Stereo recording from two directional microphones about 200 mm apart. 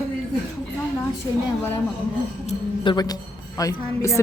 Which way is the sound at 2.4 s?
25° left (ahead or behind).